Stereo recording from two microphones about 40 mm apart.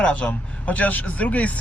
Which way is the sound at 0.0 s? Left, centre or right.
Left.